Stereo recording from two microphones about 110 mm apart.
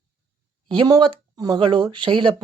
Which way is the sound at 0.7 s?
40° right (ahead or behind).